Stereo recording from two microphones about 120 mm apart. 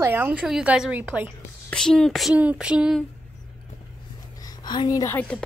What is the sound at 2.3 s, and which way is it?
Speech, 10° right (ahead or behind).